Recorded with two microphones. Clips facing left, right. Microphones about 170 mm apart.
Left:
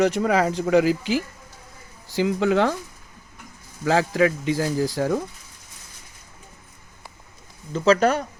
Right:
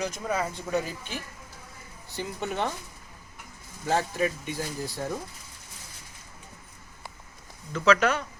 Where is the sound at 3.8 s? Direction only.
90° left.